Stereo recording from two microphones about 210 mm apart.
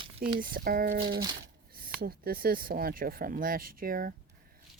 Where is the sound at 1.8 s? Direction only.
45° right (ahead or behind).